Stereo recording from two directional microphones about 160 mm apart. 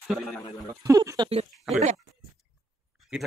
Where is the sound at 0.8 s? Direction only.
20° right (ahead or behind).